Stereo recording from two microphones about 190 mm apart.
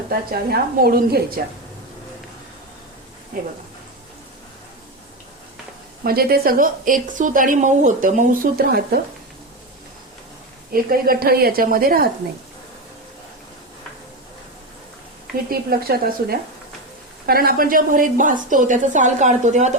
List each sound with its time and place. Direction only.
0.1 s a woman's voice: 55° right (ahead or behind)
6.0 s a woman's voice: 50° right (ahead or behind)
10.7 s a woman's voice: 50° right (ahead or behind)
15.4 s a woman's voice: 50° right (ahead or behind)